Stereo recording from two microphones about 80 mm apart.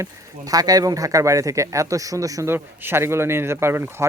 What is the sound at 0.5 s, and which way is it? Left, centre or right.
Speech, right.